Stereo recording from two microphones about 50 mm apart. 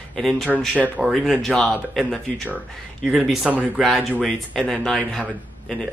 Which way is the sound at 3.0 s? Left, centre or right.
Centre.